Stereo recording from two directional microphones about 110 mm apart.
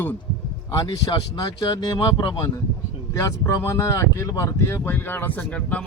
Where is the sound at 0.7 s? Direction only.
40° left (ahead or behind).